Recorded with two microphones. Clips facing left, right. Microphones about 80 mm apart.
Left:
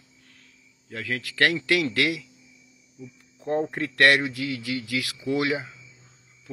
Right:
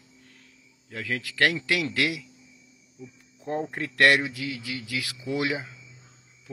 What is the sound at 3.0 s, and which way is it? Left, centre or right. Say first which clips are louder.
Cricket: left 2 dB; centre.